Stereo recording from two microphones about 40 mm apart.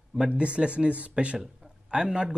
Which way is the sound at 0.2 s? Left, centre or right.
Right.